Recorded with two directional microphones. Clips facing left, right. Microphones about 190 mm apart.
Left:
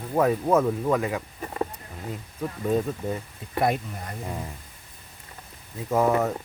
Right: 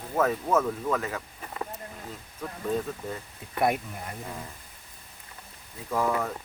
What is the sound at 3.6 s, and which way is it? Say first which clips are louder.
Speech: left 2 dB; 5° right (ahead or behind).